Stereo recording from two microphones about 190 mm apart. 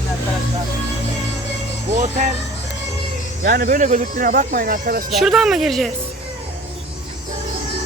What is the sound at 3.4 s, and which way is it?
Speech, 50° right (ahead or behind).